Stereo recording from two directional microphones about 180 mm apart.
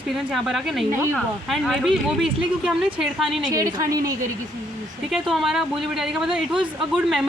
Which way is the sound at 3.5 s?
20° right (ahead or behind).